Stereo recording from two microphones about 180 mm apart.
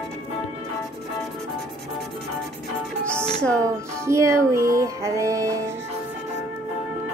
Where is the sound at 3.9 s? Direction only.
15° right (ahead or behind).